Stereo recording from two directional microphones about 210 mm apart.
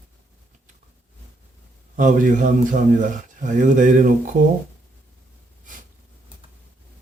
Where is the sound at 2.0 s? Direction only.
40° right (ahead or behind).